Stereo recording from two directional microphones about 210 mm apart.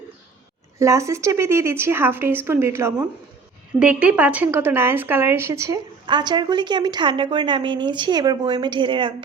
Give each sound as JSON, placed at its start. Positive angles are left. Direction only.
{"t": 0.8, "sound": "a woman's voice", "side_deg": -15}